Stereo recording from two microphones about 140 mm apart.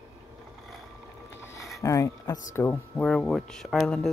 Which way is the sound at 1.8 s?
20° left (ahead or behind).